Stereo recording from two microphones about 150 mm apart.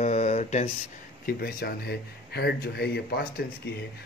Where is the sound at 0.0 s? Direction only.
50° left (ahead or behind).